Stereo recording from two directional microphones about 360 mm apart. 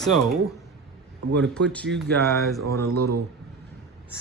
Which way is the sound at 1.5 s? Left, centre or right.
Centre.